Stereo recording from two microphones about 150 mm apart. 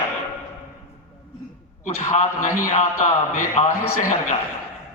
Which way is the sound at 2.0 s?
50° left (ahead or behind).